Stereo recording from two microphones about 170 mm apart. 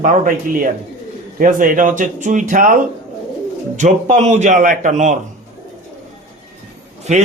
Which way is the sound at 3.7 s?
45° right (ahead or behind).